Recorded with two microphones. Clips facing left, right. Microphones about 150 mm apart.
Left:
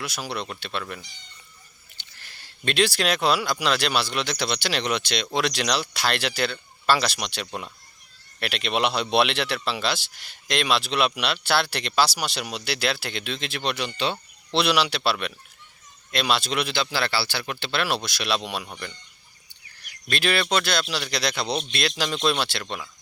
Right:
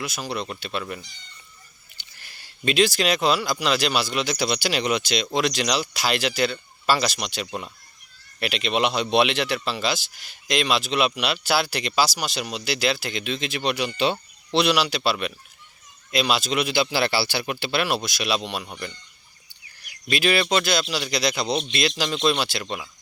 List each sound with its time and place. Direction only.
0.0 s speech: centre (ahead or behind)
2.2 s speech: 5° right (ahead or behind)
14.5 s speech: centre (ahead or behind)
20.1 s speech: 5° right (ahead or behind)